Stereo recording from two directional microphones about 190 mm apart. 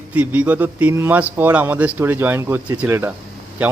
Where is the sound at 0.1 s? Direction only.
5° right (ahead or behind).